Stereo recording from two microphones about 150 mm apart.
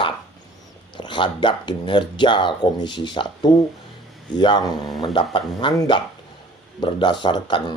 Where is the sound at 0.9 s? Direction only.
30° left (ahead or behind).